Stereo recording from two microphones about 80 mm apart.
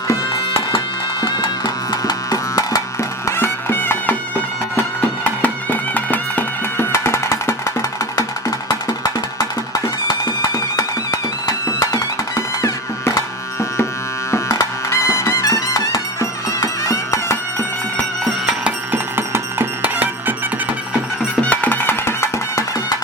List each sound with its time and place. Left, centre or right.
1.2 s music: left
6.9 s music: left
12.6 s music: left
18.6 s music: right
21.4 s music: centre